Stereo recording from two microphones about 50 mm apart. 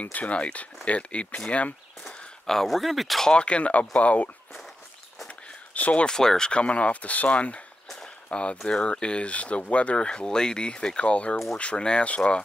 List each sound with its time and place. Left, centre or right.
0.0 s speech: left
2.0 s speech: centre
3.3 s speech: left
5.8 s speech: left
6.0 s speech: centre